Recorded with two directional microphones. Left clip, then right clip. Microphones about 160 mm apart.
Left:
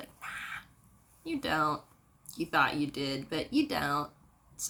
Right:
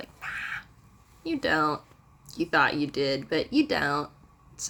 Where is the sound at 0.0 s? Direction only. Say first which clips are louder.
Right 6 dB; 35° right (ahead or behind).